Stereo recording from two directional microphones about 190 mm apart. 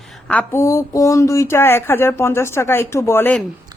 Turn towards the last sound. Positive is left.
turn(degrees=10)  # may be behind; listen again after turning